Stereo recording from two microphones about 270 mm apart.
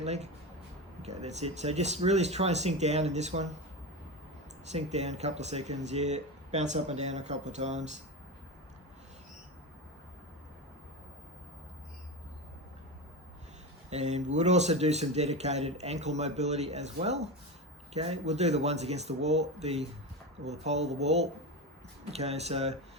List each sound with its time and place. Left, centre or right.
0.0 s speech: right
4.6 s speech: right
13.9 s speech: right